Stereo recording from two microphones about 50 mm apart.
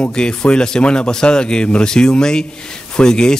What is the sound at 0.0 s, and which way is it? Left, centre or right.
Speech, centre.